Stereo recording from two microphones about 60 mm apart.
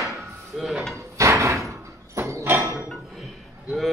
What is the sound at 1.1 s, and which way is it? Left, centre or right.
Door, right.